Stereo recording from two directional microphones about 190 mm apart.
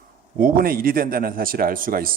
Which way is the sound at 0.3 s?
50° right (ahead or behind).